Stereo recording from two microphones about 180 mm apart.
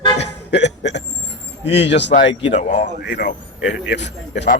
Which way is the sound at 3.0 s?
65° left (ahead or behind).